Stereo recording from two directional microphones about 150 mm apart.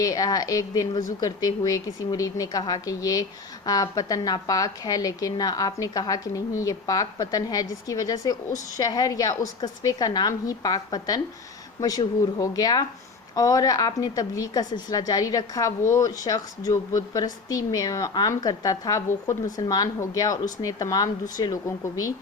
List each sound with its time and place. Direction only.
0.0 s a woman's voice: 25° left (ahead or behind)